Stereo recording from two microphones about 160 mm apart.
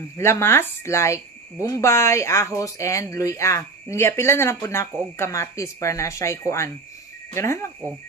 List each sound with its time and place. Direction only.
0.2 s speech: 15° left (ahead or behind)